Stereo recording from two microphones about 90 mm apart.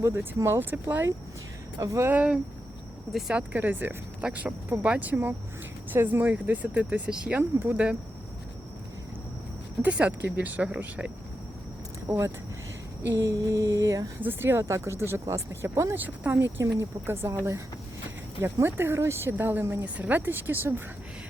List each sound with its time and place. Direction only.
0.0 s speech: 30° right (ahead or behind)
1.8 s mantra: 35° right (ahead or behind)
2.0 s speech: 15° right (ahead or behind)
3.1 s speech: centre (ahead or behind)
3.3 s speech: 15° right (ahead or behind)
9.8 s speech: 20° right (ahead or behind)
12.0 s speech: 30° right (ahead or behind)
13.2 s mantra: 40° right (ahead or behind)
14.2 s speech: 25° right (ahead or behind)
16.0 s speech: 20° right (ahead or behind)